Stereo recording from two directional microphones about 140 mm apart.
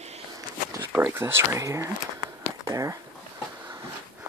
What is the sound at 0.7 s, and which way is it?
Speech, 15° right (ahead or behind).